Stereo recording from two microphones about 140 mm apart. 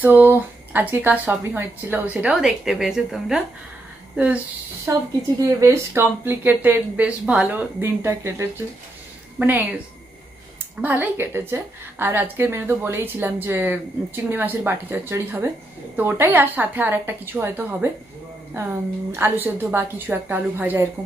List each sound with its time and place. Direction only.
0.0 s a woman's voice: 15° right (ahead or behind)
4.9 s a woman's voice: 20° right (ahead or behind)
10.8 s a woman's voice: 10° right (ahead or behind)